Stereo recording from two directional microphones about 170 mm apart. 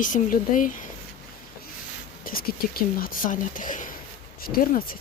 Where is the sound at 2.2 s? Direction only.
60° left (ahead or behind).